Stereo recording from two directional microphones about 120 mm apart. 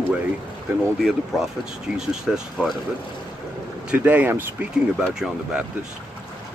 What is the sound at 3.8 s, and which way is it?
Speech, 15° right (ahead or behind).